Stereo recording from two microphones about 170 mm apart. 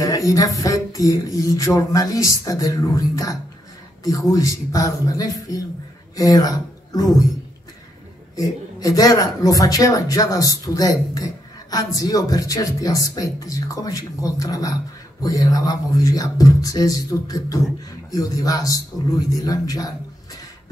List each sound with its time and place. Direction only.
0.0 s a woman's voice: 20° left (ahead or behind)
8.4 s speech: 20° left (ahead or behind)